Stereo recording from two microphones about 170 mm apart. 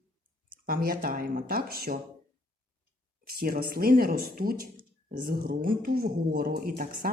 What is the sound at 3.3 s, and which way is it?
Speech, 60° right (ahead or behind).